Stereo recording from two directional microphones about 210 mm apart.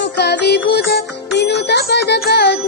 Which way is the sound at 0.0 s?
50° left (ahead or behind).